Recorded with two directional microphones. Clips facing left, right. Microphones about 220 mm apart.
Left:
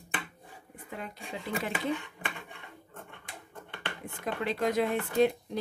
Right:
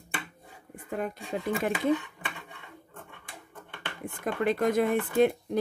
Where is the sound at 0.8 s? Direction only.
50° right (ahead or behind).